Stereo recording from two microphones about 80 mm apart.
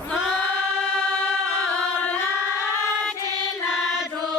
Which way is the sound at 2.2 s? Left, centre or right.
Left.